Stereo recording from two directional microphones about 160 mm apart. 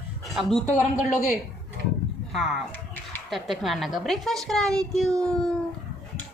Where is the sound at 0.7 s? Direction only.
50° left (ahead or behind).